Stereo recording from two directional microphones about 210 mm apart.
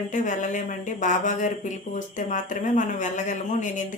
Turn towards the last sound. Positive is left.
turn(degrees=35)  # may be behind; listen again after turning